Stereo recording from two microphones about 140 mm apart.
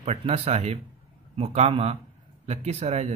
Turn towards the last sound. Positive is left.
turn(degrees=-50)  # may be behind; listen again after turning